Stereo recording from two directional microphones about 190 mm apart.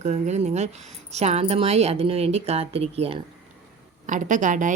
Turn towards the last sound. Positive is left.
turn(degrees=-40)  # may be behind; listen again after turning